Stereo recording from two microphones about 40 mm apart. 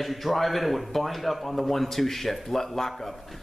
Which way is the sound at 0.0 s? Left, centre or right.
Centre.